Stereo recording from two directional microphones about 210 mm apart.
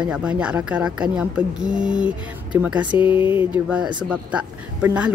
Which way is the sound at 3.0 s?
25° left (ahead or behind).